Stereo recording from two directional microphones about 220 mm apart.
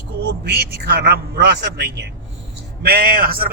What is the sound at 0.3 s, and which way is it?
A man's voice, 50° right (ahead or behind).